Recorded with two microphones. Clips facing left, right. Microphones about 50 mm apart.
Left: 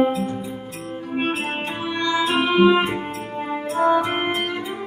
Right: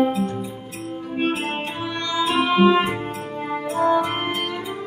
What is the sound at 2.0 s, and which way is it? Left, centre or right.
Music, centre.